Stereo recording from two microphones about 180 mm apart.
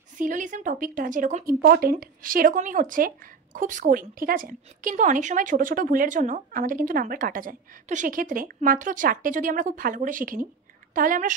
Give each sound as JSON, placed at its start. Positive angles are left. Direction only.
{"t": 0.2, "sound": "speech", "side_deg": -45}